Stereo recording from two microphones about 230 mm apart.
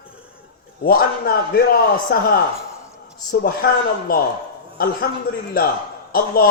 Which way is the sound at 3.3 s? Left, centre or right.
Left.